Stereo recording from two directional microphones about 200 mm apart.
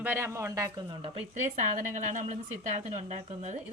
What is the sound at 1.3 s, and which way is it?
A woman's voice, 40° right (ahead or behind).